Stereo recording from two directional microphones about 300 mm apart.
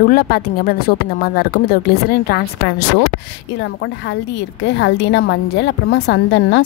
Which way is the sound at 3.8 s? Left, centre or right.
Left.